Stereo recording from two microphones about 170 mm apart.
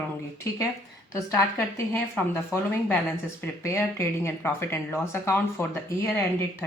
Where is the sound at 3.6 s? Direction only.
15° left (ahead or behind).